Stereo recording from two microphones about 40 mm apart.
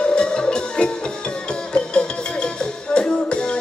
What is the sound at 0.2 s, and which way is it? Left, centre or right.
Music, left.